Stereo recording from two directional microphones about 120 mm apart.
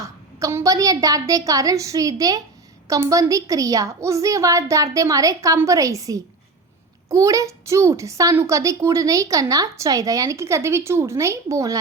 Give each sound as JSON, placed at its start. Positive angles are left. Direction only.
{"t": 0.0, "sound": "a woman's voice", "side_deg": -25}